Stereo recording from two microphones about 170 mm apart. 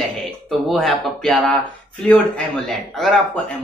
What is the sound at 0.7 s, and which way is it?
Speech, centre (ahead or behind).